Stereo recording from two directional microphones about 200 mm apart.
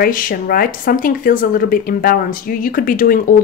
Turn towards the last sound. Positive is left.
turn(degrees=45)  # may be behind; listen again after turning